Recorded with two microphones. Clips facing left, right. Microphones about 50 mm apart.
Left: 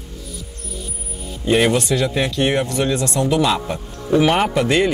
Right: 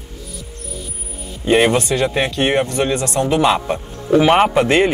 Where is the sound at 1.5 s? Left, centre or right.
Right.